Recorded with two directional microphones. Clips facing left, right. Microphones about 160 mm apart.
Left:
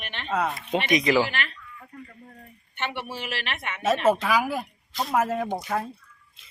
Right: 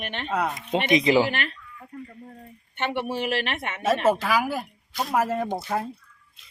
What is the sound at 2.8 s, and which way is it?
Speech, 50° right (ahead or behind).